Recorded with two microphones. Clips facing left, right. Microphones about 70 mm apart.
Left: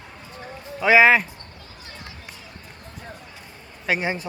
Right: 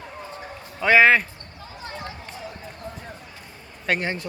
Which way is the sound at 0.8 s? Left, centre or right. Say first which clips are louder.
Left 1 dB; centre.